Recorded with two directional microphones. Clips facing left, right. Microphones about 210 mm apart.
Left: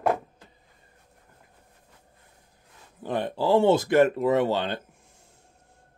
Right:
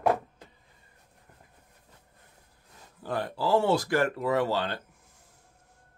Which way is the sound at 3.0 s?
20° left (ahead or behind).